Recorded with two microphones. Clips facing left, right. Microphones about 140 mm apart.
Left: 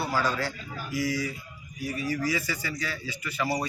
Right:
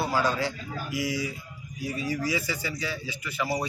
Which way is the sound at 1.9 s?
15° right (ahead or behind).